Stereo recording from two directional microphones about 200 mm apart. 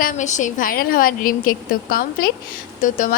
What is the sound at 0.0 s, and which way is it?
A woman's voice, 35° left (ahead or behind).